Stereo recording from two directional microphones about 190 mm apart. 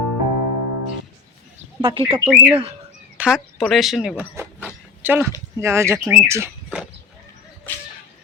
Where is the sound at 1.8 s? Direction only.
25° right (ahead or behind).